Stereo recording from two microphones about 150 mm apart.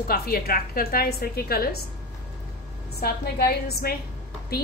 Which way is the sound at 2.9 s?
90° left.